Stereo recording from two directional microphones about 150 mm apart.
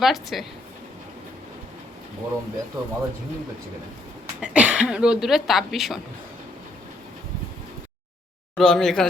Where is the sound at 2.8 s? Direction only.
20° right (ahead or behind).